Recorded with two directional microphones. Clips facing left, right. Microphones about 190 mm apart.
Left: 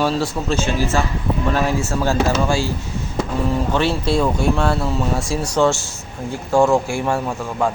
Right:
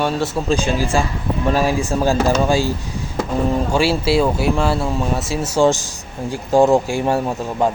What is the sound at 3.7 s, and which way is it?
Speech, 10° right (ahead or behind).